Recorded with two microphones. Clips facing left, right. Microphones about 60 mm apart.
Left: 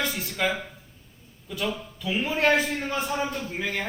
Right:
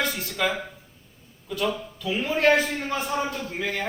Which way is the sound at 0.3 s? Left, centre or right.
Centre.